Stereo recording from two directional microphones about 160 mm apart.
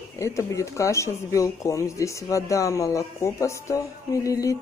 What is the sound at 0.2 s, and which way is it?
Speech, 20° left (ahead or behind).